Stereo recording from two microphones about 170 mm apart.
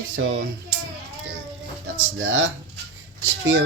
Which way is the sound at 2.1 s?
90° right.